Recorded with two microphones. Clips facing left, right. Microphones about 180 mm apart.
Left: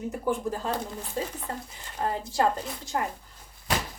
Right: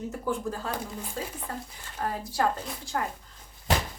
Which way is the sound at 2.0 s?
25° left (ahead or behind).